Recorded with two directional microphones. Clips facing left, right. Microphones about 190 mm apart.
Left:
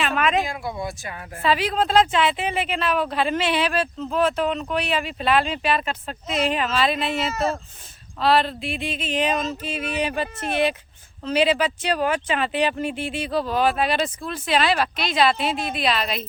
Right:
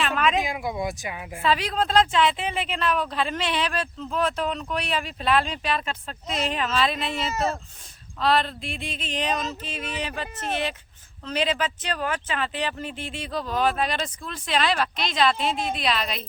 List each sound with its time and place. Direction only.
0.0 s a sound: 5° left (ahead or behind)
0.4 s speech: 15° right (ahead or behind)
1.5 s speech: 5° left (ahead or behind)
2.9 s speech: 65° left (ahead or behind)
3.2 s speech: 5° left (ahead or behind)